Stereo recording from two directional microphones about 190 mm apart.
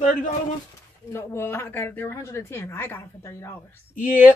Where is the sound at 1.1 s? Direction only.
15° left (ahead or behind).